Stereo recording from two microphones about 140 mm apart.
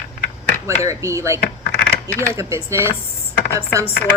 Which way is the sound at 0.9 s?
20° right (ahead or behind).